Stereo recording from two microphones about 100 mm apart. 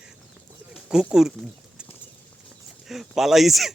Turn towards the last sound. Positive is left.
turn(degrees=0)  # may be behind; listen again after turning